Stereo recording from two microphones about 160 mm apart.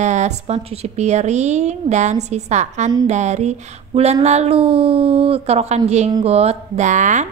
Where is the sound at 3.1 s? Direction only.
45° right (ahead or behind).